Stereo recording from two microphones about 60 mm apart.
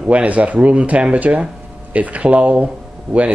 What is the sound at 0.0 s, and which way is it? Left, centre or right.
A man's voice, right.